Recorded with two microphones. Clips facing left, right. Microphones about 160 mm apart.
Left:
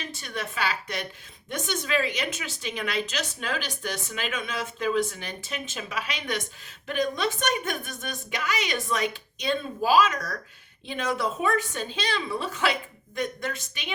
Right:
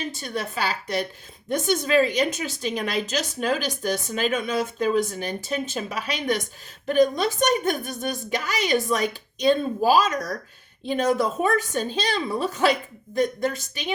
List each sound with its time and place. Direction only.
0.0 s a woman's voice: 35° right (ahead or behind)